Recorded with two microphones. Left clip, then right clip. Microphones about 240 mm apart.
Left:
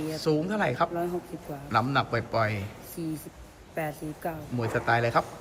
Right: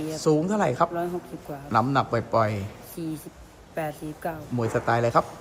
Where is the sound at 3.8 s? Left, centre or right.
Centre.